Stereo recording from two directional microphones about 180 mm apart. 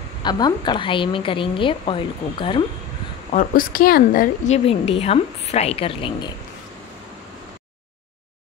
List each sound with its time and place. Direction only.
0.2 s a woman's voice: 25° left (ahead or behind)
3.3 s speech: 50° left (ahead or behind)
4.6 s a woman's voice: 35° left (ahead or behind)